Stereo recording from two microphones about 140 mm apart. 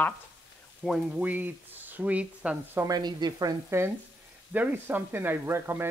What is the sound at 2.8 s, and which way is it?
Speech, 30° right (ahead or behind).